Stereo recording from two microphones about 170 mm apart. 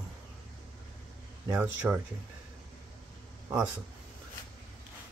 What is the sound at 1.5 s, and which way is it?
Speech, 10° right (ahead or behind).